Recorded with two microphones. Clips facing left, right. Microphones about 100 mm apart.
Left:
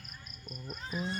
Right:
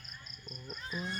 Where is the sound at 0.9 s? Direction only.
40° left (ahead or behind).